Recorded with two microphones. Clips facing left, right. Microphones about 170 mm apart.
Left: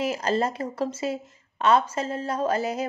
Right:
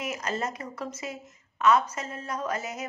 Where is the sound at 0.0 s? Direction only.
30° left (ahead or behind).